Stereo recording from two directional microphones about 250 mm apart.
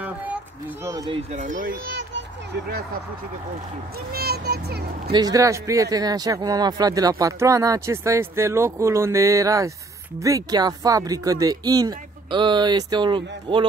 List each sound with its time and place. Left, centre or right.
0.8 s a child's voice: centre; by 2.2 s right
4.1 s a child's voice: right
5.1 s speech: centre